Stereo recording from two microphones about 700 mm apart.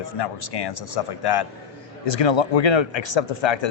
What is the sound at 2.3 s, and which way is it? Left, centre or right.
Speech, left.